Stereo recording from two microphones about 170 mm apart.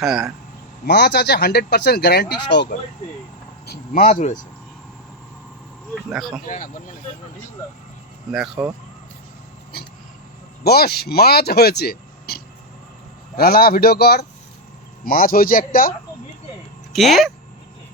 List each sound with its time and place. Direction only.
0.0 s speech: centre (ahead or behind)
0.9 s speech: 75° left (ahead or behind)
4.0 s speech: 45° left (ahead or behind)
5.9 s speech: centre (ahead or behind)
6.4 s speech: 50° left (ahead or behind)
8.3 s speech: 5° right (ahead or behind)
10.6 s speech: 70° left (ahead or behind)
16.9 s speech: centre (ahead or behind)